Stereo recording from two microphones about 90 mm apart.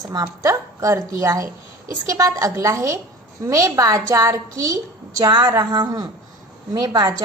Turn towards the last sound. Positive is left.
turn(degrees=-45)  # may be behind; listen again after turning